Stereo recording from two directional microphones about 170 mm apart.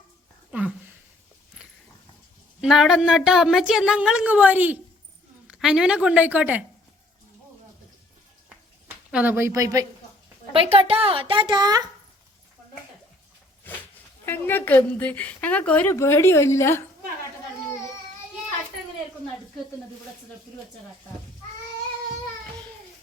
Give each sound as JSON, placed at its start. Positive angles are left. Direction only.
{"t": 0.5, "sound": "a sound", "side_deg": -10}
{"t": 2.6, "sound": "a woman's voice", "side_deg": 0}
{"t": 9.1, "sound": "a woman's voice", "side_deg": -10}
{"t": 10.5, "sound": "a woman's voice", "side_deg": -35}
{"t": 14.3, "sound": "a woman's voice", "side_deg": 10}